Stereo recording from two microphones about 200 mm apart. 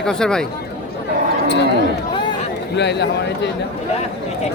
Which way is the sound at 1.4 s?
60° left (ahead or behind).